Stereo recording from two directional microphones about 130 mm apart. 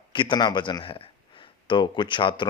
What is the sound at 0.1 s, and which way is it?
A man's voice, 40° left (ahead or behind).